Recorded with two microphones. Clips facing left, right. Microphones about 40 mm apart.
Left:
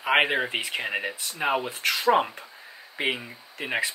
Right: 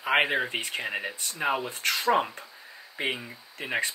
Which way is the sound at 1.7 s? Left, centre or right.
Centre.